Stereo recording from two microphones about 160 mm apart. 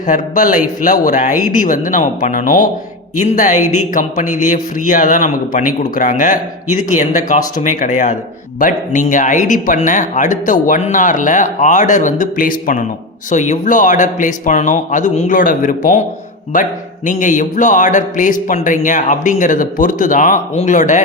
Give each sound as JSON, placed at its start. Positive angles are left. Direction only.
{"t": 0.1, "sound": "speech", "side_deg": 55}
{"t": 13.3, "sound": "speech", "side_deg": 50}
{"t": 17.1, "sound": "speech", "side_deg": 55}